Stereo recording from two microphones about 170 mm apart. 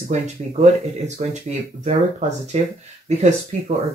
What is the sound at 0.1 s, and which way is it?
Speech, 45° right (ahead or behind).